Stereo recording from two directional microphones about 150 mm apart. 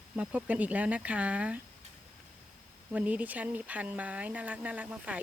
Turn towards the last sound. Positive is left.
turn(degrees=-10)  # may be behind; listen again after turning